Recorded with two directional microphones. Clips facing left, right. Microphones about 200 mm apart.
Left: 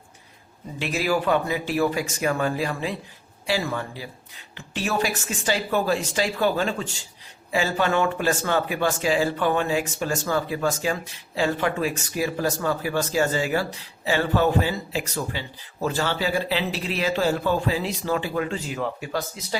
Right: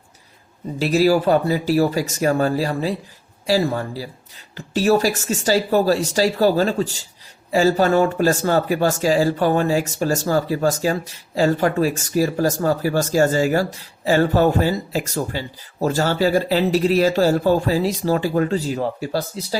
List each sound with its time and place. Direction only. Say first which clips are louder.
0.8 s speech: right 8 dB; 40° right (ahead or behind)